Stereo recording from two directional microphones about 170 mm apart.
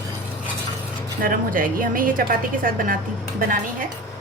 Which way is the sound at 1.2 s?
55° right (ahead or behind).